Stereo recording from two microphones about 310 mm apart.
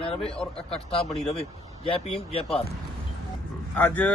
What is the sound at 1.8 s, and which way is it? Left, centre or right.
Speech, centre.